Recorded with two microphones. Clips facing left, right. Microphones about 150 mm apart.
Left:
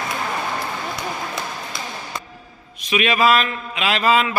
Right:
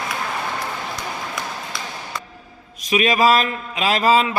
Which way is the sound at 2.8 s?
40° right (ahead or behind).